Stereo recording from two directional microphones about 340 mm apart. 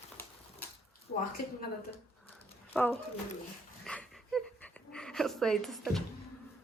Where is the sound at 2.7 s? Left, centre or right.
Centre.